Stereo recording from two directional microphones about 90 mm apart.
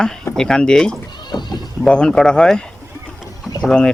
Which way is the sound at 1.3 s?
55° left (ahead or behind).